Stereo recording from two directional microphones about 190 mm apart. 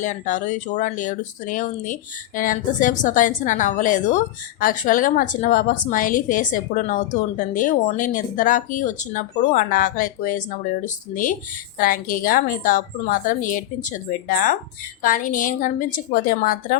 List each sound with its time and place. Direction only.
0.0 s a woman's voice: 40° left (ahead or behind)